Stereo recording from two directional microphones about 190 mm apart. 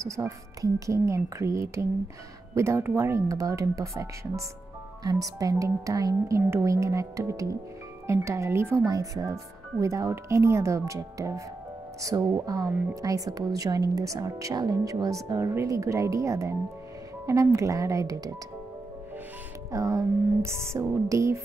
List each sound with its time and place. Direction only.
0.0 s speech: 15° right (ahead or behind)
19.7 s speech: 15° right (ahead or behind)